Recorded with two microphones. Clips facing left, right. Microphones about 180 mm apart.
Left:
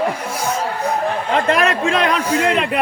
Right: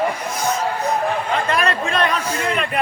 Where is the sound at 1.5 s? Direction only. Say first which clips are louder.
Left 4 dB; 75° left (ahead or behind).